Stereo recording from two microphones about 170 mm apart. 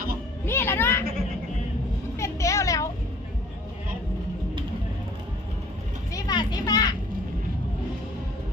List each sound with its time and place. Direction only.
0.4 s music: 15° left (ahead or behind)
2.1 s a sound: 15° left (ahead or behind)
6.1 s children playing: 25° left (ahead or behind)